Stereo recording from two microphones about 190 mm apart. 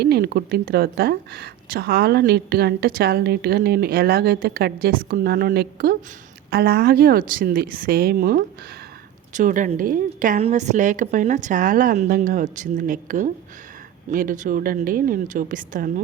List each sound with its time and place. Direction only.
0.0 s a woman's voice: 55° right (ahead or behind)